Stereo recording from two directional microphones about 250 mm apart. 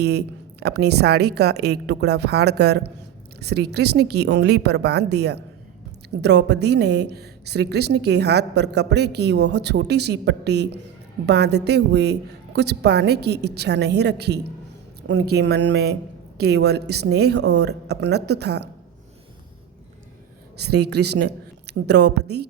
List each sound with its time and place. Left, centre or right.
0.0 s a woman's voice: right
20.6 s speech: right